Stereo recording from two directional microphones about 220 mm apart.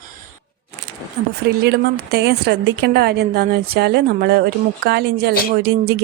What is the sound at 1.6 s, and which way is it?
Speech, 45° right (ahead or behind).